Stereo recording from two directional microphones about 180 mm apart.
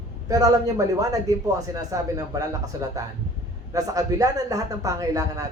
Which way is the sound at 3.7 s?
20° right (ahead or behind).